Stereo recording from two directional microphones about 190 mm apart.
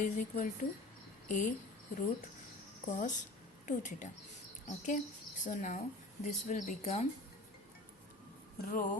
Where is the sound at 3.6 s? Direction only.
40° left (ahead or behind).